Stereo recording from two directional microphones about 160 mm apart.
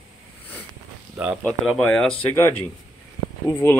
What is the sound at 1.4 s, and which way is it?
Speech, 10° left (ahead or behind).